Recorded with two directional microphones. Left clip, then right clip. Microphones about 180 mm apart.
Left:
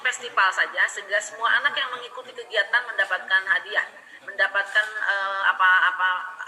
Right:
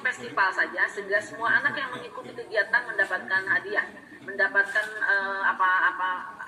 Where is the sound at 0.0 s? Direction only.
15° left (ahead or behind).